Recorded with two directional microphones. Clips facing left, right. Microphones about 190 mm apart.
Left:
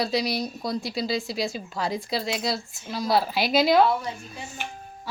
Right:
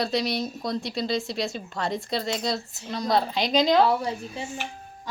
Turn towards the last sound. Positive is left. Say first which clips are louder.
# right 4 dB
turn(degrees=-35)  # may be behind; listen again after turning